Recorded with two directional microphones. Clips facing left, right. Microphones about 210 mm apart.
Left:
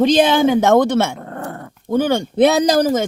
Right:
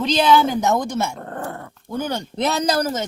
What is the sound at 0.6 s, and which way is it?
Speech, 90° left.